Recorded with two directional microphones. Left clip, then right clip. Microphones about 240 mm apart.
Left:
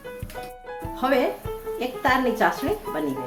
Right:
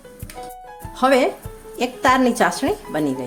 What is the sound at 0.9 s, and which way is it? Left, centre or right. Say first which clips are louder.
A woman's voice: right 6 dB; right.